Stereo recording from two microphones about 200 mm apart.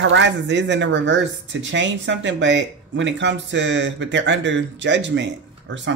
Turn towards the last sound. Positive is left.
turn(degrees=-65)  # may be behind; listen again after turning